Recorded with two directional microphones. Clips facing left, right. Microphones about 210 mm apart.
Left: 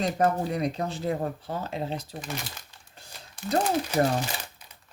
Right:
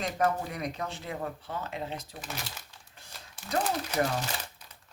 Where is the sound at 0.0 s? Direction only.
35° left (ahead or behind).